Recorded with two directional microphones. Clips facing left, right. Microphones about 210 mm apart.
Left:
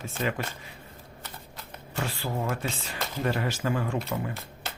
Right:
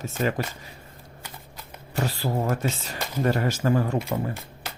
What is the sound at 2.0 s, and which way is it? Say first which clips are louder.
Speech: right 5 dB; 40° right (ahead or behind).